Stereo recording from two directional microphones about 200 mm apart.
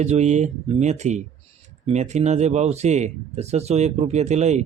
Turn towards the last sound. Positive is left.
turn(degrees=-35)  # may be behind; listen again after turning